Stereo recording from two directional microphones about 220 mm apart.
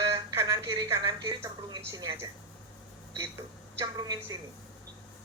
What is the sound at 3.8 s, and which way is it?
Speech, 15° right (ahead or behind).